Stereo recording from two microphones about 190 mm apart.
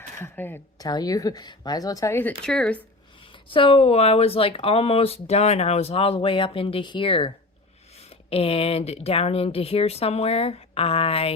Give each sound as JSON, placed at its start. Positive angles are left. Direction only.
{"t": 0.2, "sound": "speech", "side_deg": 10}
{"t": 2.4, "sound": "speech", "side_deg": 5}
{"t": 3.2, "sound": "speech", "side_deg": 25}